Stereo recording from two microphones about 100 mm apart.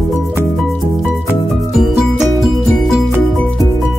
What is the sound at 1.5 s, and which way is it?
Music, centre (ahead or behind).